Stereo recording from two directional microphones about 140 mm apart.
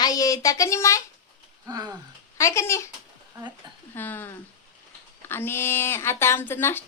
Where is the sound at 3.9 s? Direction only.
15° left (ahead or behind).